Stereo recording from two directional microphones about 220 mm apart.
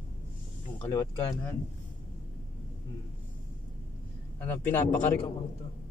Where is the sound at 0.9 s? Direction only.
10° left (ahead or behind).